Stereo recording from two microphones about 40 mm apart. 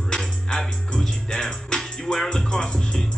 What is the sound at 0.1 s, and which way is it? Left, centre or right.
Music, centre.